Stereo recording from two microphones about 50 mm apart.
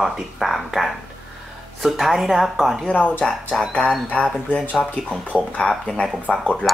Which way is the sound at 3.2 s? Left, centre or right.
Centre.